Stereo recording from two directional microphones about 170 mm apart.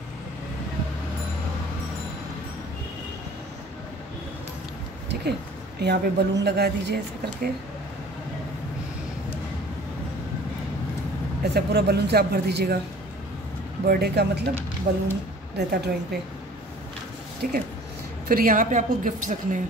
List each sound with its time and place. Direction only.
5.8 s a woman's voice: 75° right (ahead or behind)
11.5 s a woman's voice: 70° right (ahead or behind)
13.8 s a woman's voice: 70° right (ahead or behind)
17.4 s a woman's voice: 60° right (ahead or behind)